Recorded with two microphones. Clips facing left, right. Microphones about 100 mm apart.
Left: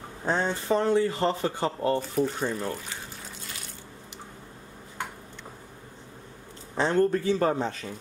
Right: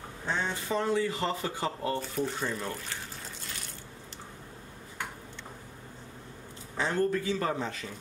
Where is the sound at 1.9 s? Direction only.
5° left (ahead or behind).